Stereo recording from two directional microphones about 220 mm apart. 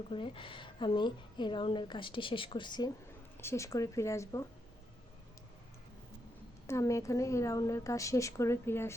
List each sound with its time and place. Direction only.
0.1 s a woman's voice: 25° left (ahead or behind)
6.7 s a woman's voice: 15° left (ahead or behind)